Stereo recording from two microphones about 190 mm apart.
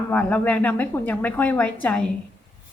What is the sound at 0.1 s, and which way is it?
A woman's voice, 5° left (ahead or behind).